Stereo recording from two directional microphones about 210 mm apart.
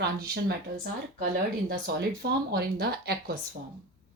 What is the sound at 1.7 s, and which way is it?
Speech, 50° right (ahead or behind).